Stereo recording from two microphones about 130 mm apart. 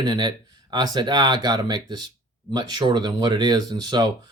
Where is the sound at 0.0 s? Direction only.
35° right (ahead or behind).